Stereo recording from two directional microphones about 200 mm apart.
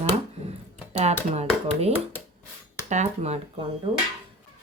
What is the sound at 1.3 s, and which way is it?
Speech, 30° right (ahead or behind).